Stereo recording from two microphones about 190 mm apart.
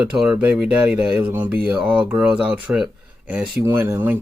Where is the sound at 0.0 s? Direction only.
5° right (ahead or behind).